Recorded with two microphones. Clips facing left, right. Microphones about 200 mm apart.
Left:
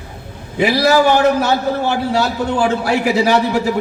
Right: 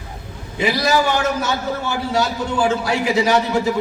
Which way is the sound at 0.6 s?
60° left (ahead or behind).